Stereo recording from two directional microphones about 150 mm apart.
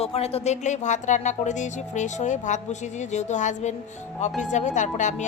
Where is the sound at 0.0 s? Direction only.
40° left (ahead or behind).